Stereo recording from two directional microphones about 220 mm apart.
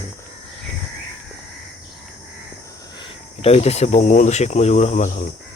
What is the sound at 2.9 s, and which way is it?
Speech, 25° left (ahead or behind).